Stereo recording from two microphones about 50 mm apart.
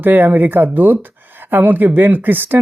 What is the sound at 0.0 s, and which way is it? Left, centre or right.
Speech, right.